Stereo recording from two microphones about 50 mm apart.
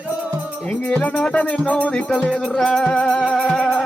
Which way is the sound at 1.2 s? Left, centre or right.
Left.